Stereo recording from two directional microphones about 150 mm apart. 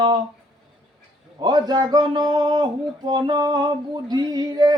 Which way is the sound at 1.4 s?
30° right (ahead or behind).